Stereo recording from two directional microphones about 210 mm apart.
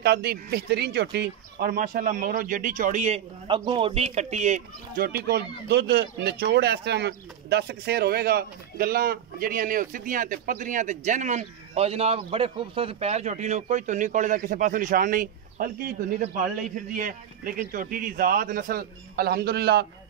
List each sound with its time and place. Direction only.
0.0 s speech: 50° right (ahead or behind)